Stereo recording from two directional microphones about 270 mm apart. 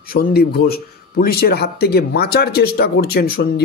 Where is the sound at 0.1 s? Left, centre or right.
Left.